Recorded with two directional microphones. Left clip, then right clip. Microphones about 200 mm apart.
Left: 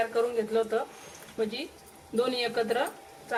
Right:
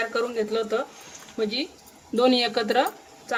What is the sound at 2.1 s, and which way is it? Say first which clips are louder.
Speech: right 6 dB; 55° right (ahead or behind).